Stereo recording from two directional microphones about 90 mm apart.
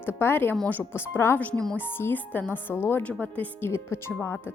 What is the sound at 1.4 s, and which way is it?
Speech, 10° left (ahead or behind).